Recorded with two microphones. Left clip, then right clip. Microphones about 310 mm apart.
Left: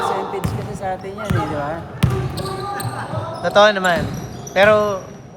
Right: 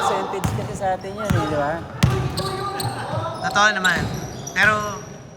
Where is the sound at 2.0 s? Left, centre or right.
Centre.